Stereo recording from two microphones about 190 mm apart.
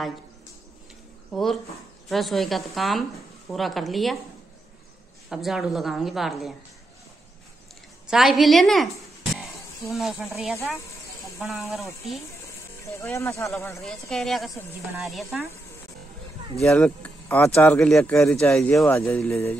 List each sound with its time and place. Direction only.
1.3 s a woman's voice: centre (ahead or behind)
5.3 s a woman's voice: centre (ahead or behind)
8.1 s a woman's voice: centre (ahead or behind)
13.0 s speech: 15° left (ahead or behind)
13.8 s a woman's voice: centre (ahead or behind)
16.6 s speech: 5° left (ahead or behind)